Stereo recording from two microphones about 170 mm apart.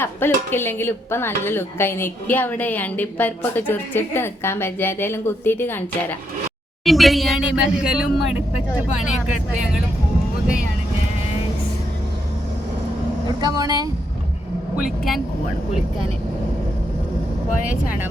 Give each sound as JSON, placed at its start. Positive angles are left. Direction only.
{"t": 0.0, "sound": "speech", "side_deg": 15}
{"t": 6.8, "sound": "speech", "side_deg": 0}
{"t": 13.2, "sound": "speech", "side_deg": -25}
{"t": 14.8, "sound": "speech", "side_deg": 0}